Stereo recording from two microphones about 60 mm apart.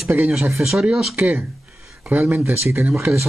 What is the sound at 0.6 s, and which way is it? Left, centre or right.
Speech, centre.